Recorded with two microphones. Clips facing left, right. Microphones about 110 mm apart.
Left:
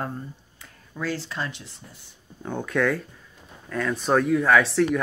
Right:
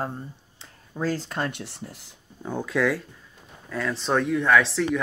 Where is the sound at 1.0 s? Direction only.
45° right (ahead or behind); by 2.1 s 80° right.